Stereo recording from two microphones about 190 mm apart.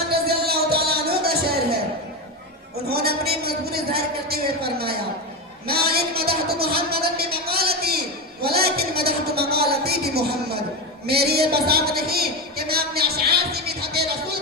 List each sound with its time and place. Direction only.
0.1 s music: 55° right (ahead or behind)
2.9 s a man's voice: 55° right (ahead or behind)
8.4 s a sound: 55° right (ahead or behind)
11.0 s a man's voice: 55° right (ahead or behind)